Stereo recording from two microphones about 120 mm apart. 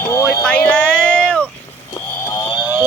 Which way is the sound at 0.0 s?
25° left (ahead or behind).